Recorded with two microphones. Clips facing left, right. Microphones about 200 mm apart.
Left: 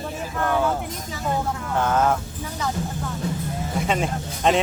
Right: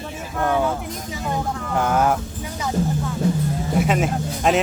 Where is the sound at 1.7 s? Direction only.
10° right (ahead or behind).